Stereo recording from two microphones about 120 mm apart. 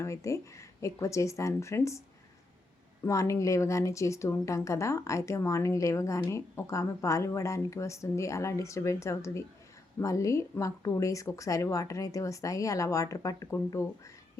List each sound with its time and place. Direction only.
0.0 s speech: 25° left (ahead or behind)
3.1 s speech: 25° left (ahead or behind)